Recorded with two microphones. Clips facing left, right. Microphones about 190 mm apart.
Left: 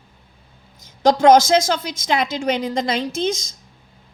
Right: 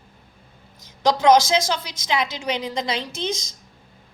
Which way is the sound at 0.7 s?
50° left (ahead or behind).